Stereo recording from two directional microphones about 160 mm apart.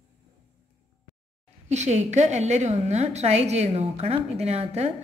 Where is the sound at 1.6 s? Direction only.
45° right (ahead or behind).